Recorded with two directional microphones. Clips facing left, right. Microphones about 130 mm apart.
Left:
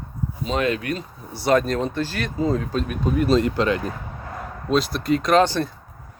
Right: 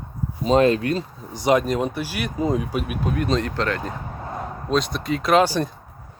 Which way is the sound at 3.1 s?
5° left (ahead or behind).